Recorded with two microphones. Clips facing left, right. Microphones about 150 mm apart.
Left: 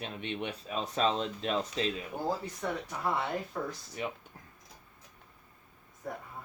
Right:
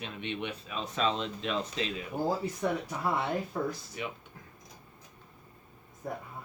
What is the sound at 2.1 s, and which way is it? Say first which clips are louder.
Speech: right 8 dB; 5° right (ahead or behind).